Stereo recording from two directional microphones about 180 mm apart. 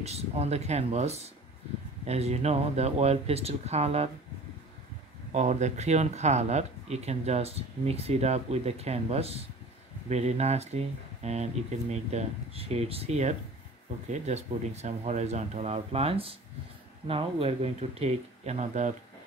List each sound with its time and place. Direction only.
0.0 s speech: 35° right (ahead or behind)
5.3 s speech: 40° right (ahead or behind)